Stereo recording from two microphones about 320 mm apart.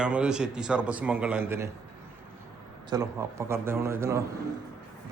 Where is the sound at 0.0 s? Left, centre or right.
Centre.